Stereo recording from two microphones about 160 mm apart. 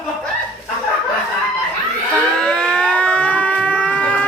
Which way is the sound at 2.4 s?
5° left (ahead or behind).